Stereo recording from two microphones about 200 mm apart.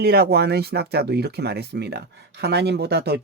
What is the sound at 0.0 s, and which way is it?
Speech, 55° right (ahead or behind).